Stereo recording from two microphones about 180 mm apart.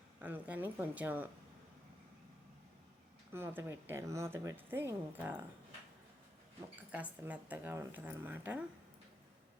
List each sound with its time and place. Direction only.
0.2 s a woman's voice: 10° right (ahead or behind)
3.3 s a woman's voice: 15° right (ahead or behind)
6.9 s a woman's voice: 10° right (ahead or behind)